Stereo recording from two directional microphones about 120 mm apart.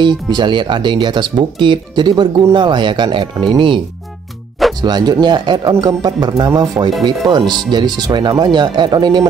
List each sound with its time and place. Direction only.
0.0 s speech: 40° right (ahead or behind)
4.8 s speech: 35° right (ahead or behind)